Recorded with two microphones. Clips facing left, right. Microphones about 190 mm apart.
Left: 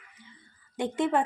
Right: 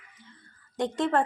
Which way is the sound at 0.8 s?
5° left (ahead or behind).